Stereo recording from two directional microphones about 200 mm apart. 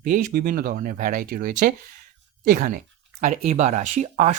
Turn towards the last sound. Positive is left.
turn(degrees=-35)  # may be behind; listen again after turning